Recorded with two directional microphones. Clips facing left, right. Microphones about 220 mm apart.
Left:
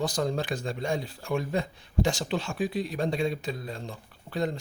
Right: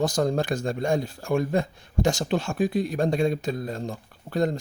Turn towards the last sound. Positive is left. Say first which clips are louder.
# right 5 dB
turn(degrees=-45)  # may be behind; listen again after turning